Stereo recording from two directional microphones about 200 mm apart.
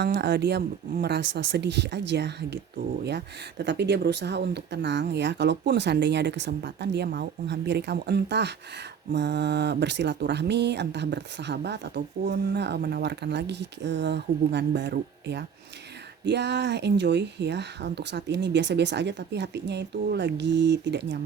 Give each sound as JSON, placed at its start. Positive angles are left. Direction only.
{"t": 0.0, "sound": "speech", "side_deg": -55}